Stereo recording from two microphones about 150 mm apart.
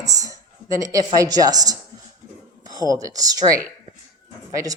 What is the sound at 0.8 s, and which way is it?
A woman's voice, 20° right (ahead or behind).